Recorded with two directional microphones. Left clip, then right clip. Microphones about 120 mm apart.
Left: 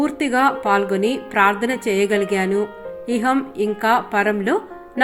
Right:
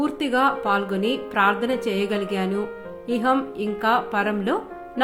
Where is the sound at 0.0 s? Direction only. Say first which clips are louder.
Left 3 dB; 35° left (ahead or behind).